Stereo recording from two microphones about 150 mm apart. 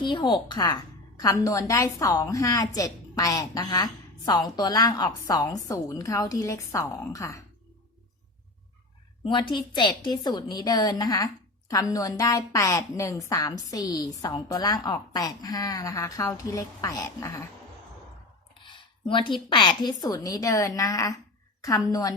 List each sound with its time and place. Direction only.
0.0 s a woman's voice: 30° left (ahead or behind)
9.2 s a woman's voice: 30° left (ahead or behind)
18.6 s a woman's voice: 35° left (ahead or behind)